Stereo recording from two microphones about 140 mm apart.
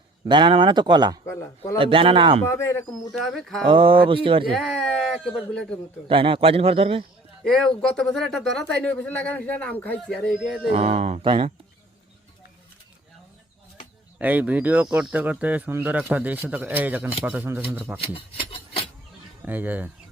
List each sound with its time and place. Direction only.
0.3 s speech: 35° right (ahead or behind)
1.3 s speech: 20° left (ahead or behind)
1.8 s speech: 40° right (ahead or behind)
2.5 s speech: 20° left (ahead or behind)
3.1 s a man's voice: centre (ahead or behind)
3.7 s speech: 40° right (ahead or behind)
4.5 s a man's voice: 5° left (ahead or behind)
6.1 s a man's voice: 40° right (ahead or behind)
7.4 s a man's voice: 5° left (ahead or behind)
10.3 s a man's voice: centre (ahead or behind)
10.7 s a man's voice: 50° right (ahead or behind)
14.2 s speech: 10° right (ahead or behind)
18.0 s rub: 40° left (ahead or behind)
19.5 s speech: 10° right (ahead or behind)